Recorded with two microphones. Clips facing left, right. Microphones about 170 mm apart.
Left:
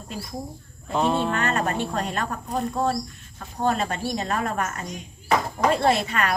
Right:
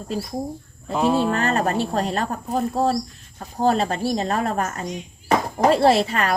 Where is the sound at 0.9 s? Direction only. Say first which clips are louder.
Right 3 dB; 5° right (ahead or behind).